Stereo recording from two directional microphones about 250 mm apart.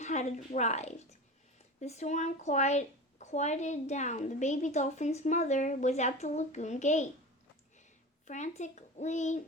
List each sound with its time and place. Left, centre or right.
0.0 s a woman's voice: left
8.3 s a woman's voice: left